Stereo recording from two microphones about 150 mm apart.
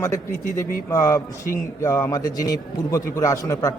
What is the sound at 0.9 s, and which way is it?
Speech, 20° left (ahead or behind).